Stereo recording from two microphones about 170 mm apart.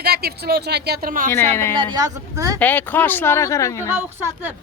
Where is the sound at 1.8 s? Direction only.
25° right (ahead or behind).